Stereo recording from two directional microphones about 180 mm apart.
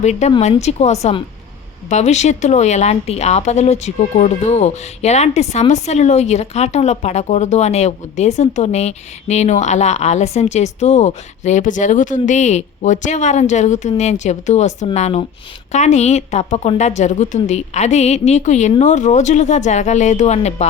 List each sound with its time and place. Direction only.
0.0 s speech: 40° left (ahead or behind)